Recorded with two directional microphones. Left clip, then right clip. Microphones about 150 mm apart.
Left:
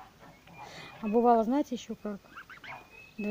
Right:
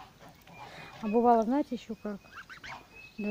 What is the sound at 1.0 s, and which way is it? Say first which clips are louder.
Speech: even; 5° left (ahead or behind).